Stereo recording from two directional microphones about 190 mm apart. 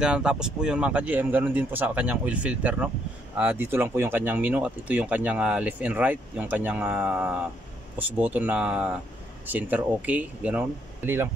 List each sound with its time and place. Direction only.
0.0 s speech: 5° right (ahead or behind)